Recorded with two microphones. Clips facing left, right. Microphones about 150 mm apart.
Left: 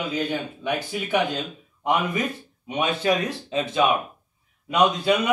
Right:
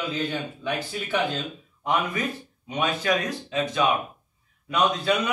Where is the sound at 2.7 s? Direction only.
25° left (ahead or behind).